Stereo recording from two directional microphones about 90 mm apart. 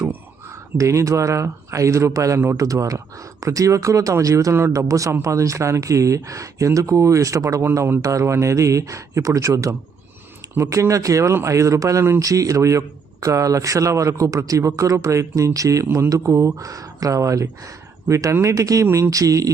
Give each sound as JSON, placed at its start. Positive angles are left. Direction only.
{"t": 0.8, "sound": "speech", "side_deg": -35}